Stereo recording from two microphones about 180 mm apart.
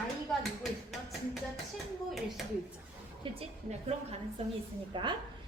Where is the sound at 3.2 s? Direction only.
30° right (ahead or behind).